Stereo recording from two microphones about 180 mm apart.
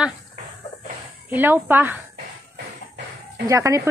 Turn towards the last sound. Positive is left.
turn(degrees=-15)  # may be behind; listen again after turning